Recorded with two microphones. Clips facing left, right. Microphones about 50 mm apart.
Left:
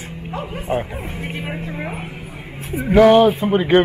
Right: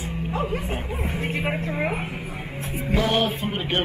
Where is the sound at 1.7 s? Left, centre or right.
Centre.